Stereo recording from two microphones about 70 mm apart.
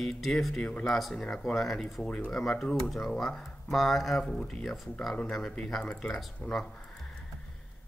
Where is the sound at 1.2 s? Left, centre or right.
Centre.